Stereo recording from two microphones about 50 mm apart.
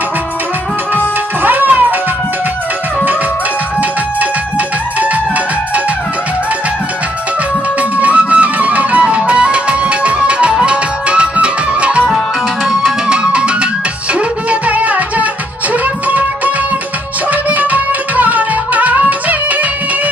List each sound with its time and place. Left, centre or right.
0.9 s music: right
8.3 s music: right
13.1 s music: right
17.3 s music: right